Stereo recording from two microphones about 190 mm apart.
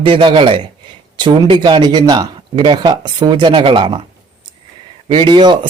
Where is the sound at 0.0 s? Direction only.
25° right (ahead or behind).